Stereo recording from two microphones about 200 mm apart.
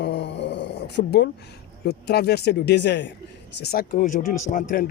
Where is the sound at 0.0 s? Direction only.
60° left (ahead or behind).